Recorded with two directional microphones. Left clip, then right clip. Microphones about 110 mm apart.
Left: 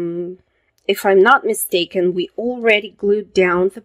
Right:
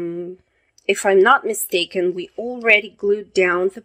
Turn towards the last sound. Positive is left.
turn(degrees=30)  # may be behind; listen again after turning